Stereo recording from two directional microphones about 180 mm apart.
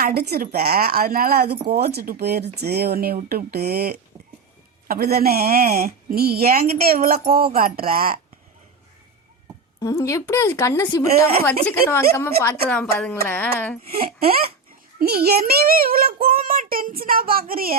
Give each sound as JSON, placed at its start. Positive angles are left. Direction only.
{"t": 0.0, "sound": "speech", "side_deg": -60}
{"t": 9.8, "sound": "a woman's voice", "side_deg": 15}
{"t": 13.8, "sound": "speech", "side_deg": -55}
{"t": 16.2, "sound": "child singing", "side_deg": -55}